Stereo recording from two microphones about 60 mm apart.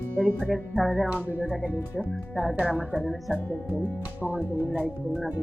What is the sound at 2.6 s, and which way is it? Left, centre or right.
Speech, right.